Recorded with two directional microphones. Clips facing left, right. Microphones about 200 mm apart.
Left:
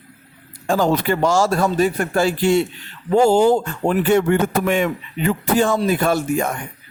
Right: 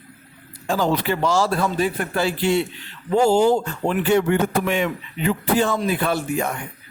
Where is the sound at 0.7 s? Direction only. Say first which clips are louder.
Left 3 dB; 45° left (ahead or behind).